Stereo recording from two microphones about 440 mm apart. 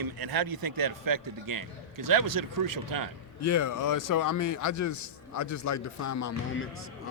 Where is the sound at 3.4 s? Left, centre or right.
Left.